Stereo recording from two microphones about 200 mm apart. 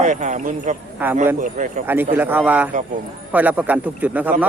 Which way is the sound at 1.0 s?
10° right (ahead or behind).